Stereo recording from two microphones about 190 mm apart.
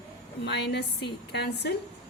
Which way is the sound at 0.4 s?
60° left (ahead or behind).